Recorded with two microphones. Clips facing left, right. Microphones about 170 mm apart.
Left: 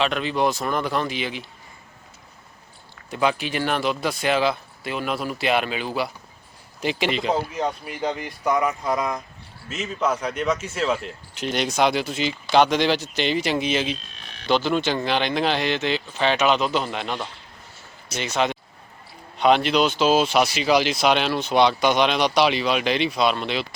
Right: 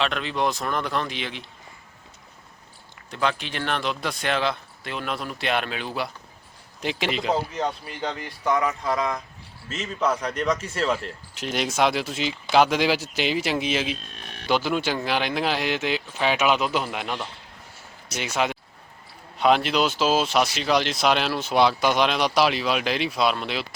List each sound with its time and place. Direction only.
0.0 s speech: centre (ahead or behind)
3.1 s speech: 5° left (ahead or behind)
8.4 s speech: 20° left (ahead or behind)
9.6 s speech: 5° left (ahead or behind)
18.2 s speech: 5° right (ahead or behind)